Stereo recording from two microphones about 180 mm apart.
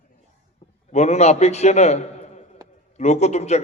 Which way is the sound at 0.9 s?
40° left (ahead or behind).